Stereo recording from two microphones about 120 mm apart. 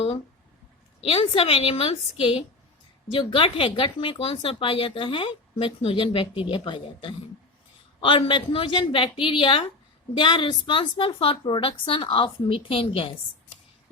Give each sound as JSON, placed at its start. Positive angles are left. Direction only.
{"t": 1.0, "sound": "speech", "side_deg": 50}